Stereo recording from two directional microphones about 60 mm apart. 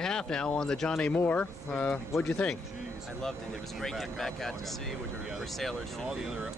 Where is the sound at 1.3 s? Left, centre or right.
Left.